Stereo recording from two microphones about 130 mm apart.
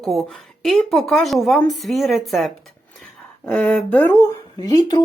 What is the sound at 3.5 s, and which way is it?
Speech, 10° left (ahead or behind).